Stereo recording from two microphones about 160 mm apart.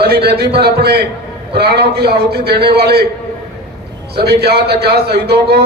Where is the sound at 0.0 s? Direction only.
75° right (ahead or behind).